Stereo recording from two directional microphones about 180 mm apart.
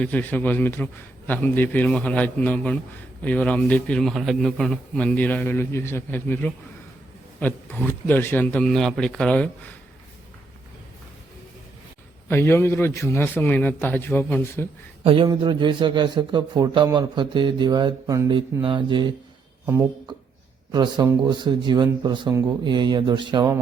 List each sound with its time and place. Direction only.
0.0 s a man's voice: 10° left (ahead or behind)
12.3 s a man's voice: 15° left (ahead or behind)
15.0 s a man's voice: 30° right (ahead or behind)
20.1 s a sound: 25° right (ahead or behind)
20.7 s a man's voice: 25° right (ahead or behind)